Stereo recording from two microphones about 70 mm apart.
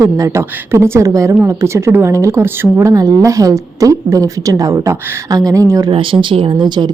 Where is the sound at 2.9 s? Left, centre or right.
Right.